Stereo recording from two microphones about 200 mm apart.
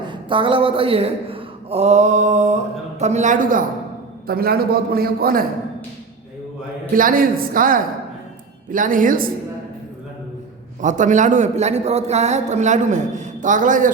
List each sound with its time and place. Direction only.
0.0 s a man's voice: 25° right (ahead or behind); by 5.5 s 45° right (ahead or behind)
6.9 s a man's voice: 45° right (ahead or behind)
10.8 s a man's voice: 40° right (ahead or behind)